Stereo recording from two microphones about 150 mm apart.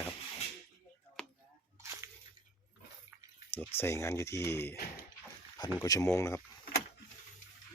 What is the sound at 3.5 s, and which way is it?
Speech, 15° left (ahead or behind).